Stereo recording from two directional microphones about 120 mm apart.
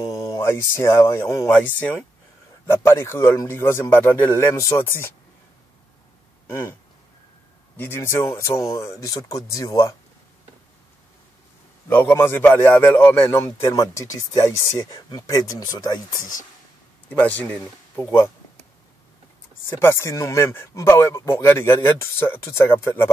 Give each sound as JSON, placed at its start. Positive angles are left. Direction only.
{"t": 0.0, "sound": "speech", "side_deg": 25}
{"t": 1.5, "sound": "a man's voice", "side_deg": 10}
{"t": 6.5, "sound": "a man's voice", "side_deg": 20}
{"t": 11.9, "sound": "a man's voice", "side_deg": 15}
{"t": 17.1, "sound": "speech", "side_deg": 15}
{"t": 19.8, "sound": "a man's voice", "side_deg": 20}